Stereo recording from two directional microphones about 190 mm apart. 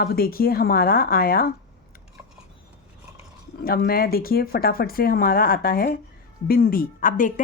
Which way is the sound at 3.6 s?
50° left (ahead or behind).